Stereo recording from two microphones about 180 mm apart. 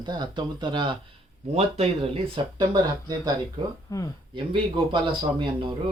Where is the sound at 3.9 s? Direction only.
20° left (ahead or behind).